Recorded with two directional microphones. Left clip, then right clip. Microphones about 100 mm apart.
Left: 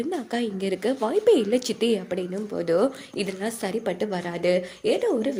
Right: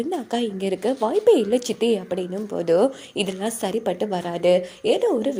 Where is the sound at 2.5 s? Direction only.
35° right (ahead or behind).